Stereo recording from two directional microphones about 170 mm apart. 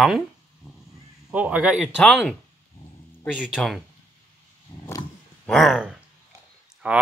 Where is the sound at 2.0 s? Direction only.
5° left (ahead or behind).